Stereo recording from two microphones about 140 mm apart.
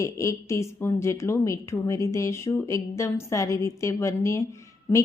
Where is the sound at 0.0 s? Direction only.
20° left (ahead or behind).